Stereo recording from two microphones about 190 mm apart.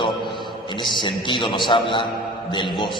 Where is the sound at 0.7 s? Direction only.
25° left (ahead or behind).